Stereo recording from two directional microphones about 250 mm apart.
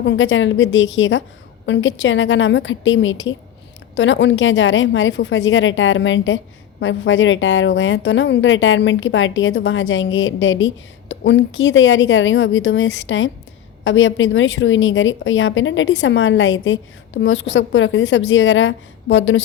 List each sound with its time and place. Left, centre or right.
0.0 s a woman's voice: left